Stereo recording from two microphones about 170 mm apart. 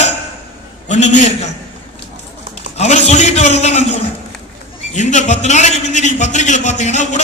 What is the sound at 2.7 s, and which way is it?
A man's voice, 40° left (ahead or behind).